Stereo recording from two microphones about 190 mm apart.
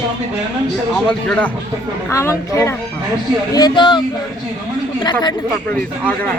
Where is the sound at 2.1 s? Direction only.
15° left (ahead or behind).